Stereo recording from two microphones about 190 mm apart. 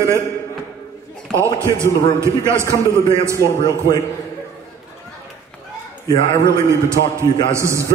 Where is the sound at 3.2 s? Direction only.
15° right (ahead or behind).